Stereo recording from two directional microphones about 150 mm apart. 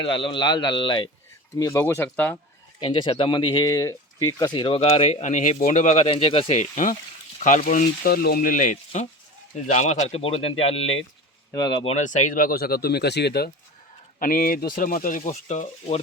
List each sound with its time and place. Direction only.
0.0 s speech: 35° left (ahead or behind)
1.5 s speech: 20° left (ahead or behind)
2.8 s speech: 35° left (ahead or behind)
11.5 s speech: 25° left (ahead or behind)
11.9 s speech: 55° left (ahead or behind); by 13.5 s 90° left
14.2 s speech: 70° left (ahead or behind); by 16.0 s 50° left (ahead or behind)